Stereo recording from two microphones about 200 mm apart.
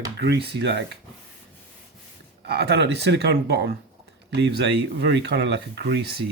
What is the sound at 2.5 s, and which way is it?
Speech, 55° right (ahead or behind).